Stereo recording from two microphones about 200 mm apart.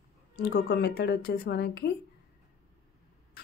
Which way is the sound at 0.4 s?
55° left (ahead or behind).